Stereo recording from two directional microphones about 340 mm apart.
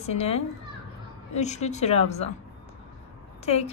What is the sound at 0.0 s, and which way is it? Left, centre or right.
A woman's voice, centre.